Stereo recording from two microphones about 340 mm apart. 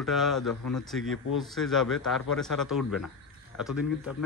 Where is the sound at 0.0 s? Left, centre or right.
Centre.